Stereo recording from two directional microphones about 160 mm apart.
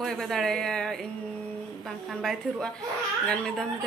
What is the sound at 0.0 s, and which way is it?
Speech, centre (ahead or behind).